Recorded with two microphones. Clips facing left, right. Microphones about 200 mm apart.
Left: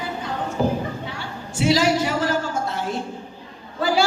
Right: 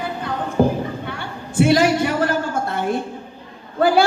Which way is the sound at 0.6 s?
55° right (ahead or behind).